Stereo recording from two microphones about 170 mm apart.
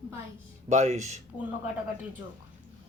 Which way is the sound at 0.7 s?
40° right (ahead or behind).